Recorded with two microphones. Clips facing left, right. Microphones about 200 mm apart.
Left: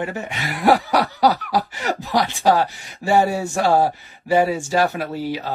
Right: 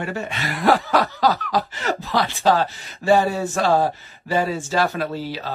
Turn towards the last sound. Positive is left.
turn(degrees=15)  # may be behind; listen again after turning